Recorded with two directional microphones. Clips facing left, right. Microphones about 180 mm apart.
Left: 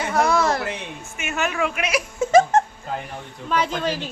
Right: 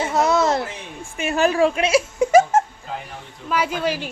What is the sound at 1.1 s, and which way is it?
Speech, 35° right (ahead or behind).